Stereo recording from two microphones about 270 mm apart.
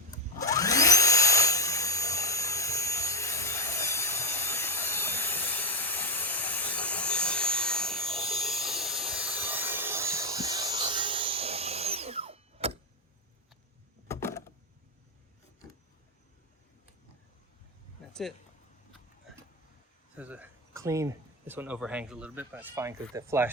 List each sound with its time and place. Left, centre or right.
0.3 s vacuum cleaner: centre; by 12.7 s right
14.1 s a sound: centre
20.1 s speech: centre